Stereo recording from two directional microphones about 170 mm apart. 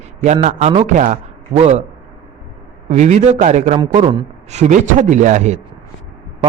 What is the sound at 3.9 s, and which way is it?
Speech, 30° right (ahead or behind).